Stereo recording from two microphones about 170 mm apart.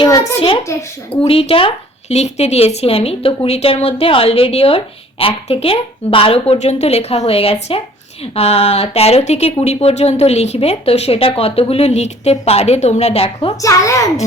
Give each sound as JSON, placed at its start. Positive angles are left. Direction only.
{"t": 0.3, "sound": "speech", "side_deg": 35}
{"t": 0.7, "sound": "speech", "side_deg": 15}
{"t": 1.2, "sound": "speech", "side_deg": 35}
{"t": 13.6, "sound": "a woman's voice", "side_deg": 20}